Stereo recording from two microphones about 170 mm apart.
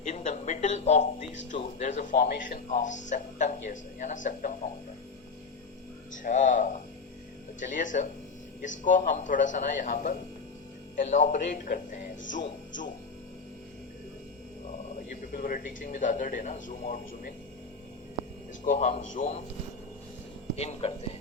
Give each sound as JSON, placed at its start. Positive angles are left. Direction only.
{"t": 0.0, "sound": "a sound", "side_deg": 45}
{"t": 1.8, "sound": "speech", "side_deg": 45}
{"t": 6.2, "sound": "speech", "side_deg": 45}
{"t": 14.9, "sound": "speech", "side_deg": 50}
{"t": 18.6, "sound": "speech", "side_deg": 40}
{"t": 20.6, "sound": "speech", "side_deg": 40}